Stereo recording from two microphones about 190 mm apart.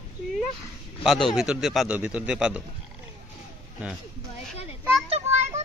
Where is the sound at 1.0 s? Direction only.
Centre (ahead or behind).